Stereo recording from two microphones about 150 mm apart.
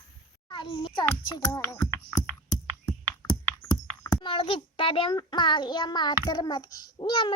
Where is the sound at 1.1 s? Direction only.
20° left (ahead or behind).